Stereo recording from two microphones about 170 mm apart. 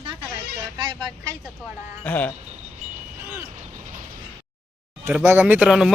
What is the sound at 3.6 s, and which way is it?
Vehicle, 45° right (ahead or behind).